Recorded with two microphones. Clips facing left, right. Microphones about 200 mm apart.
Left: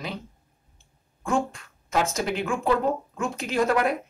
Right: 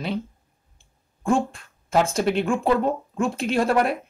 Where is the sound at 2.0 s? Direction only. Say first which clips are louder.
Right 5 dB; 30° right (ahead or behind).